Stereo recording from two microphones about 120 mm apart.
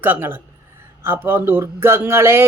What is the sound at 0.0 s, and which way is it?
A man's voice, 20° right (ahead or behind).